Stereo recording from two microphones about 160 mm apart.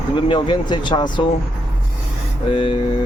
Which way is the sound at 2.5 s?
30° left (ahead or behind).